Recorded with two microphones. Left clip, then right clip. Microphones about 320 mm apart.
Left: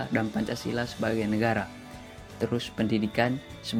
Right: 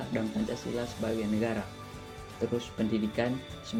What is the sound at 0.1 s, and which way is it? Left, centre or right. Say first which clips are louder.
Speech: left 1 dB; left.